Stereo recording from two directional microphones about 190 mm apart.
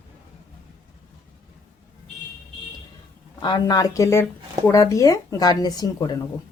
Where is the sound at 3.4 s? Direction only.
20° left (ahead or behind).